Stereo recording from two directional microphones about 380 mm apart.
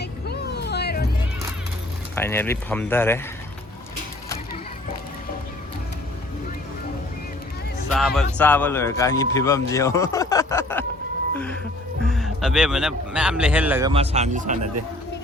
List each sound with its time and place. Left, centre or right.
0.0 s music: left
2.1 s a man's voice: centre
7.9 s a man's voice: centre
12.0 s a man's voice: centre